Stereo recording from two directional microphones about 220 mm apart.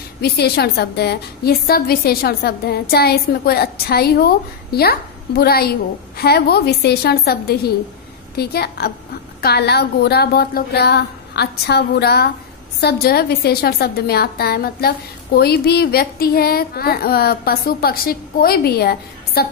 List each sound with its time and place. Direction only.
0.2 s a woman's voice: 45° left (ahead or behind)